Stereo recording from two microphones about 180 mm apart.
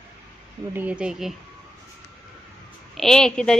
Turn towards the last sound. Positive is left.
turn(degrees=5)  # may be behind; listen again after turning